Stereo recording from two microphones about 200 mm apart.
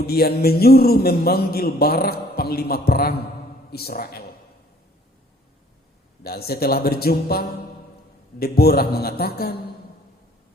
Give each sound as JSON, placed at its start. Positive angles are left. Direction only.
{"t": 0.1, "sound": "a man's voice", "side_deg": 50}
{"t": 6.2, "sound": "a man's voice", "side_deg": 50}